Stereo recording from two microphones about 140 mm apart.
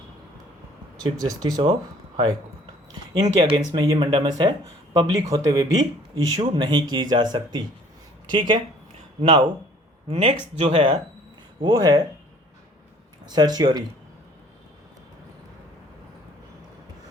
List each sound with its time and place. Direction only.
1.0 s speech: 25° right (ahead or behind)
3.2 s speech: 25° right (ahead or behind)
10.1 s speech: 50° right (ahead or behind)
11.6 s speech: 25° right (ahead or behind)
13.2 s speech: 30° right (ahead or behind)